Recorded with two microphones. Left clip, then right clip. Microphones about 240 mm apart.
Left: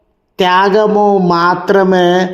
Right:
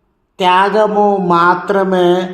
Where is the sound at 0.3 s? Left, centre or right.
Left.